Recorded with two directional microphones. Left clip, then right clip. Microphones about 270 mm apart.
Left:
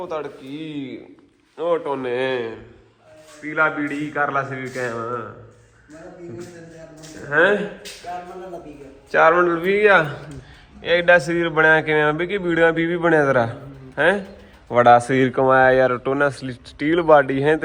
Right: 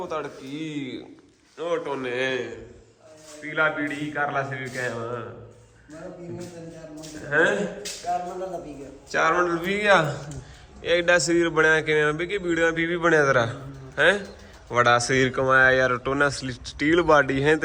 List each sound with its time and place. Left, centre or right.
0.0 s a man's voice: centre
0.7 s speech: right
1.5 s a man's voice: centre